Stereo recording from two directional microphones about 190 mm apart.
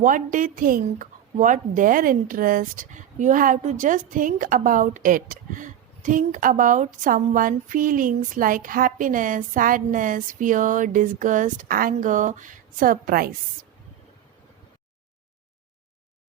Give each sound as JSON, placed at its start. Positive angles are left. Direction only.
{"t": 0.0, "sound": "a woman's voice", "side_deg": -45}